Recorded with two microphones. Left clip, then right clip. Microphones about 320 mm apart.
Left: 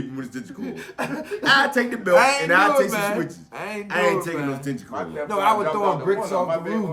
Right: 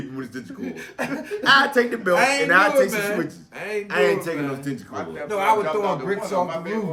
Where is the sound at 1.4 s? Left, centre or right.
Centre.